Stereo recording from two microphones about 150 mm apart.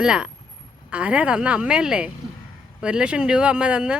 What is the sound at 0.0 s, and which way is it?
Speech, 5° right (ahead or behind).